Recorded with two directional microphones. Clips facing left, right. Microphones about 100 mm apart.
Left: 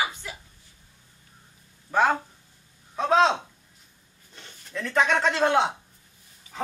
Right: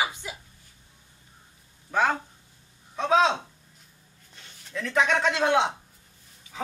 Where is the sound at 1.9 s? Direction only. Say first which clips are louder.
Left 2 dB; centre (ahead or behind).